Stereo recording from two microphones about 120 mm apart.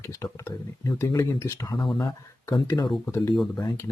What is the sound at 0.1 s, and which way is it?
Speech, 25° left (ahead or behind).